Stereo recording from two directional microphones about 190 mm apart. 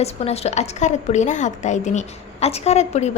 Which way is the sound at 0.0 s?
35° left (ahead or behind).